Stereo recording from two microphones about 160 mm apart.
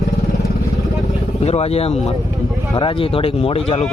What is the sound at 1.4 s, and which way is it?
Speech, 40° left (ahead or behind).